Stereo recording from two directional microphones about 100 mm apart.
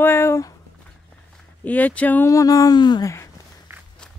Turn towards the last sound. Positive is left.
turn(degrees=-20)  # may be behind; listen again after turning